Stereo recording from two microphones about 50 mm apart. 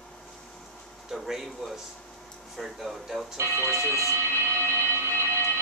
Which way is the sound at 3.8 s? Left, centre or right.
Right.